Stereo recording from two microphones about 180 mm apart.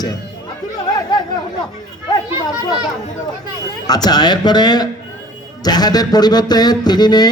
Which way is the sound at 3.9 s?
20° left (ahead or behind).